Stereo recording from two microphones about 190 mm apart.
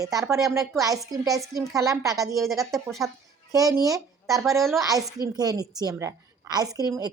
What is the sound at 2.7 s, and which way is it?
Speech, centre (ahead or behind).